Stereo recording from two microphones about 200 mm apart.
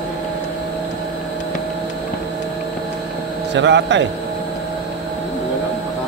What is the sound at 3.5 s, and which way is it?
Speech, 60° right (ahead or behind).